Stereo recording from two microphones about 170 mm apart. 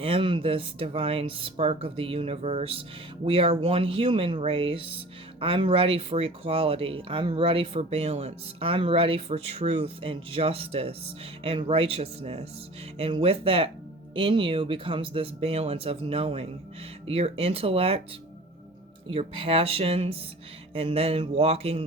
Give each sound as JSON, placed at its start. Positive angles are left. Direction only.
{"t": 0.0, "sound": "speech", "side_deg": -30}
{"t": 19.0, "sound": "speech", "side_deg": -35}